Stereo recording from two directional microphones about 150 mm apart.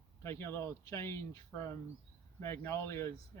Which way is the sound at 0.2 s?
20° left (ahead or behind).